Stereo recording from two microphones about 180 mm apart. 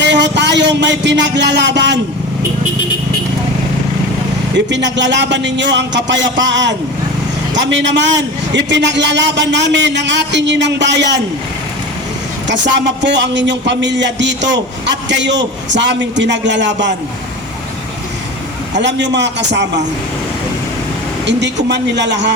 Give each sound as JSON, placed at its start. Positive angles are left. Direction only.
{"t": 0.0, "sound": "a sound", "side_deg": -75}
{"t": 4.5, "sound": "a man's voice", "side_deg": -80}
{"t": 12.5, "sound": "a man's voice", "side_deg": -80}
{"t": 18.8, "sound": "a man's voice", "side_deg": -75}
{"t": 21.2, "sound": "a man's voice", "side_deg": -75}